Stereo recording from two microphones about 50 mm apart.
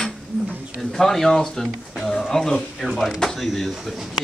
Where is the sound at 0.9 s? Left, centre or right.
Centre.